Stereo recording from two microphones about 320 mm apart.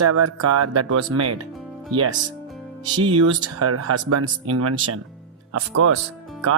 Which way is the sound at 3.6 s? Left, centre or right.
Right.